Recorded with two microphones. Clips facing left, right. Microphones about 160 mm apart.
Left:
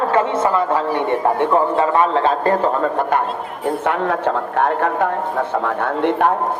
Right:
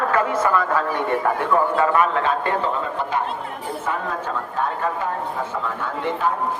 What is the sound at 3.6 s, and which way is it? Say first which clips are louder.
A man's voice: left 9 dB; 70° left (ahead or behind).